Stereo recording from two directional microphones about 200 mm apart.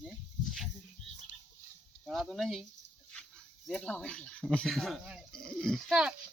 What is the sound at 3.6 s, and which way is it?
Speech, 5° left (ahead or behind).